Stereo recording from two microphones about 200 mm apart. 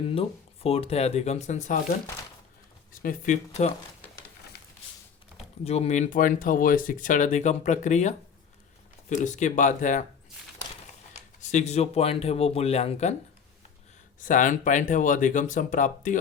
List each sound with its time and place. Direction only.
0.1 s speech: 30° left (ahead or behind)
2.9 s speech: 45° left (ahead or behind)
4.5 s a sound: 55° left (ahead or behind)
5.6 s speech: 30° left (ahead or behind)
11.1 s speech: 35° left (ahead or behind)
14.2 s speech: 40° left (ahead or behind)